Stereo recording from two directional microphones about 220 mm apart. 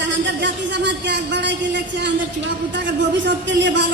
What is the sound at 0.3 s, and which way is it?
Speech, 55° right (ahead or behind).